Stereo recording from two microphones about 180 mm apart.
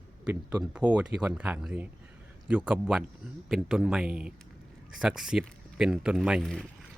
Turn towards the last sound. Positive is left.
turn(degrees=0)  # may be behind; listen again after turning